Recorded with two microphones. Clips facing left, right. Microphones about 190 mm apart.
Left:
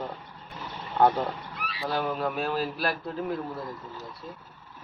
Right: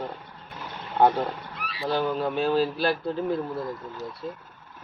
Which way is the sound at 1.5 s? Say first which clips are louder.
Right 1 dB; centre (ahead or behind).